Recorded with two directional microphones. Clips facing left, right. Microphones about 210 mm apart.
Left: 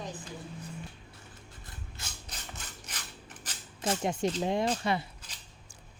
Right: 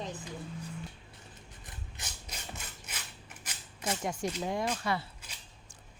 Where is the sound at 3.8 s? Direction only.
30° left (ahead or behind).